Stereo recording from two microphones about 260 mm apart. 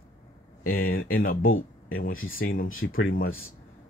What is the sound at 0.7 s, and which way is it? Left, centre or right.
Speech, left.